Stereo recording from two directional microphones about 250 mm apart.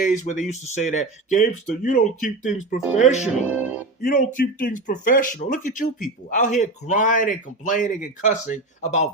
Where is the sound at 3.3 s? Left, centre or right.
Centre.